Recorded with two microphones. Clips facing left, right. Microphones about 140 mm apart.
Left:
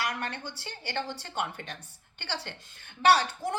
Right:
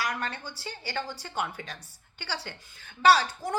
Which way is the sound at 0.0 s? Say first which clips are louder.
Right 1 dB; 65° left (ahead or behind).